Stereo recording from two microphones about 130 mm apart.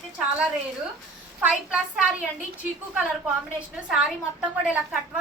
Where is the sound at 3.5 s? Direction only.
5° right (ahead or behind).